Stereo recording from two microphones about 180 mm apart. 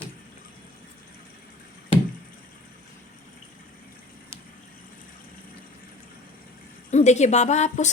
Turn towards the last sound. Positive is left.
turn(degrees=40)  # may be behind; listen again after turning